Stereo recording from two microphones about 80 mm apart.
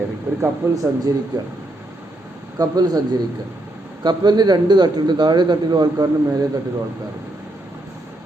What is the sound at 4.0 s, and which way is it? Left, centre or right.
A man's voice, right.